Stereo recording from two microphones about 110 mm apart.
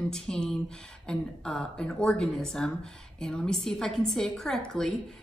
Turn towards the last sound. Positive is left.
turn(degrees=5)  # may be behind; listen again after turning